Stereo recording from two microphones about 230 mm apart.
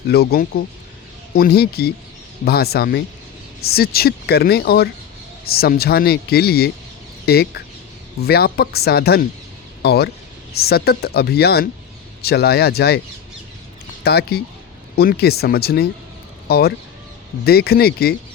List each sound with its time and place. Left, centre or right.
0.1 s speech: left
14.0 s speech: left